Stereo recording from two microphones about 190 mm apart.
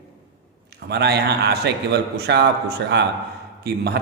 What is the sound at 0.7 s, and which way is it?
A man's voice, 60° right (ahead or behind).